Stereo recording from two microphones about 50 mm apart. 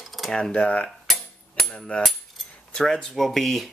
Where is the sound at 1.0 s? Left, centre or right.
Centre.